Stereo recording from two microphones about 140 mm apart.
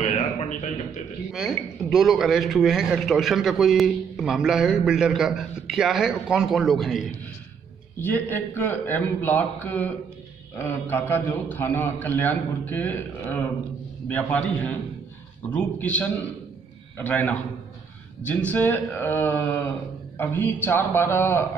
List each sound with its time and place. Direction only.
0.0 s a sound: 55° left (ahead or behind)
1.3 s speech: centre (ahead or behind)
8.0 s a man's voice: 15° left (ahead or behind)
18.5 s a man's voice: 15° left (ahead or behind)